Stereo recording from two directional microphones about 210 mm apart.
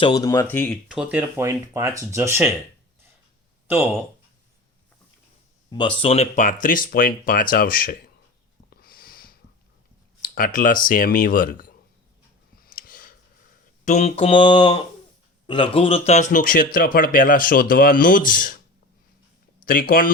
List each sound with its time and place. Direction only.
0.0 s speech: 15° left (ahead or behind)
0.9 s speech: 5° right (ahead or behind)
5.7 s speech: 25° left (ahead or behind); by 8.1 s 45° left (ahead or behind)
8.7 s a sound: 45° left (ahead or behind)
10.2 s speech: 40° left (ahead or behind)
12.6 s a sound: 40° left (ahead or behind)
13.8 s mantra: 35° left (ahead or behind)
15.4 s speech: 25° left (ahead or behind); by 18.6 s 40° left (ahead or behind)
19.6 s speech: 40° left (ahead or behind)